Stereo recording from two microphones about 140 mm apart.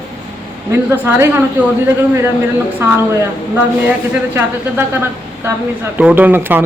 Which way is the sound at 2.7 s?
15° right (ahead or behind).